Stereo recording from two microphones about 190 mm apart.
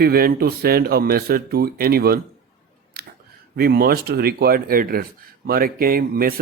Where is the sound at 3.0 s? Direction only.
55° right (ahead or behind).